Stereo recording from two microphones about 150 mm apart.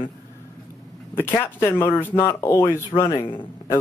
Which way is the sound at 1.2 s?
15° left (ahead or behind).